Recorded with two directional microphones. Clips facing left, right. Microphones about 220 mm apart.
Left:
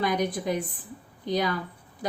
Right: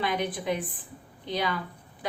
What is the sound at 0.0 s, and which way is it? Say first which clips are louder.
A woman's voice: left 3 dB; 40° left (ahead or behind).